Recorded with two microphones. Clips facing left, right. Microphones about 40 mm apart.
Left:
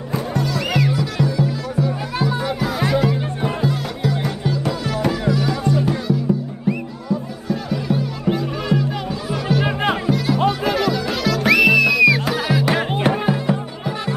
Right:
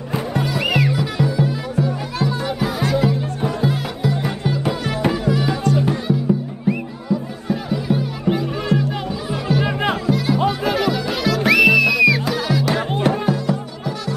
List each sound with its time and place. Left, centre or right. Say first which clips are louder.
0.1 s music: even; centre
2.2 s music: even; centre
3.6 s music: right 1 dB; centre
4.5 s music: right 1 dB; centre
7.4 s music: right 1 dB; centre
8.7 s music: even; left
9.3 s music: even; centre
12.3 s music: left 1 dB; centre; by 14.1 s left